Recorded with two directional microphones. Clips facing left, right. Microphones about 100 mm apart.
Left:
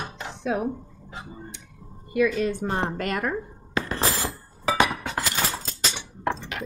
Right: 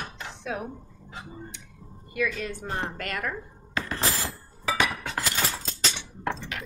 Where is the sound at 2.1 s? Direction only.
25° left (ahead or behind).